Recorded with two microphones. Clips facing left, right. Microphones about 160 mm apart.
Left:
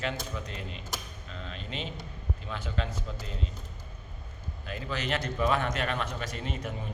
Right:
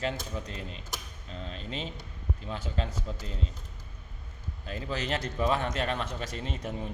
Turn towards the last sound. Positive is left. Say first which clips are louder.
# even
turn(degrees=-30)  # may be behind; listen again after turning